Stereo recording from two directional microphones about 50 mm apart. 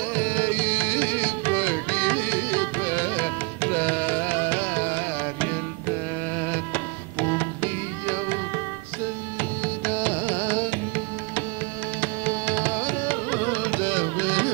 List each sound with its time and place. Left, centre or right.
0.1 s carnatic music: left
6.4 s music: left
9.4 s carnatic music: left
12.0 s carnatic music: left